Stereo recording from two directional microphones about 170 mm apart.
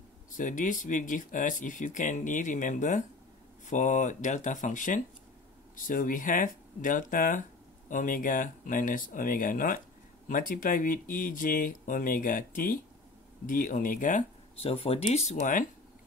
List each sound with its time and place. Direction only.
0.4 s speech: 50° left (ahead or behind)
14.6 s speech: 35° left (ahead or behind)